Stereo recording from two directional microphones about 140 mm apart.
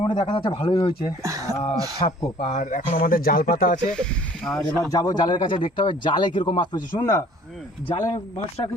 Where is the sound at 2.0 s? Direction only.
50° left (ahead or behind); by 3.7 s 80° left.